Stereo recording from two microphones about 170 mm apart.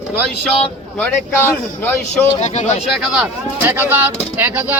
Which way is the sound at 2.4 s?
45° left (ahead or behind).